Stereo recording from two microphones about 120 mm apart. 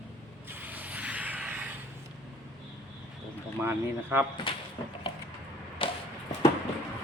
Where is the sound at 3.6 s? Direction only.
20° right (ahead or behind).